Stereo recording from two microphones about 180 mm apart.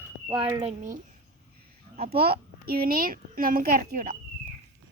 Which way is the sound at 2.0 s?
60° right (ahead or behind).